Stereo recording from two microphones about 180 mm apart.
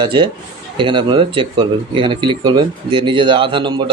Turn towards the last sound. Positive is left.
turn(degrees=-25)  # may be behind; listen again after turning